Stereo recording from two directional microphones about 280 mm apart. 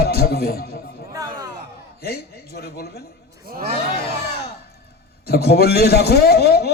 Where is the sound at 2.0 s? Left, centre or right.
Left.